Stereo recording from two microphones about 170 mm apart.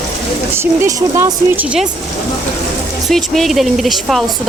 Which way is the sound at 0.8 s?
15° right (ahead or behind).